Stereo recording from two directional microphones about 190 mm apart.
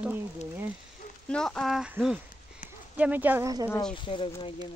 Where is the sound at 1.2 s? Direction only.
5° left (ahead or behind).